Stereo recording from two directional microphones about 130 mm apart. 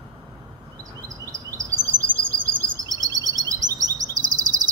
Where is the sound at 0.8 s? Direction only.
25° right (ahead or behind).